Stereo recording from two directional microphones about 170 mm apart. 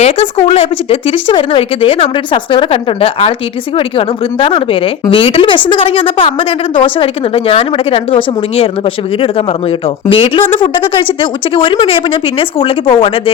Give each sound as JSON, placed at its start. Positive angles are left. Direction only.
{"t": 0.0, "sound": "speech", "side_deg": 35}